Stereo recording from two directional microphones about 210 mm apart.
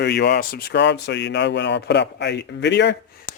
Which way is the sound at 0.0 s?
55° left (ahead or behind).